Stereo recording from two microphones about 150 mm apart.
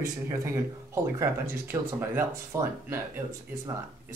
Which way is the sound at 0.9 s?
15° right (ahead or behind).